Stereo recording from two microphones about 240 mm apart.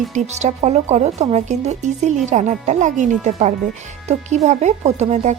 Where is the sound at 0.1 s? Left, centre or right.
Right.